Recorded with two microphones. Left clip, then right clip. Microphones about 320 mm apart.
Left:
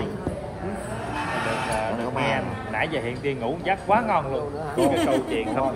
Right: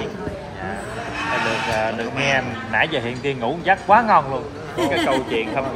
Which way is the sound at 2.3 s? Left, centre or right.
Right.